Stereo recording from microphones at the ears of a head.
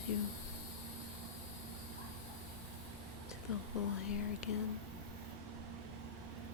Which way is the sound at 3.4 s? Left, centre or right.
Left.